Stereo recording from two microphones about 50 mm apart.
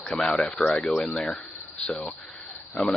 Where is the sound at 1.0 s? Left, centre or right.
Centre.